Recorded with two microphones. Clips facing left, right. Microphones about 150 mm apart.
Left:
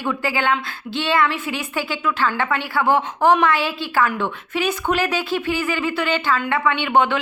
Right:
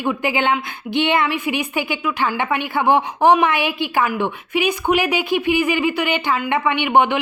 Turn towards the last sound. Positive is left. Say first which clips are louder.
# right 2 dB
turn(degrees=-15)  # may be behind; listen again after turning